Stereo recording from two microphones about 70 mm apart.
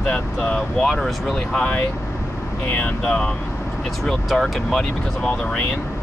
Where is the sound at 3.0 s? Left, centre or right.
Centre.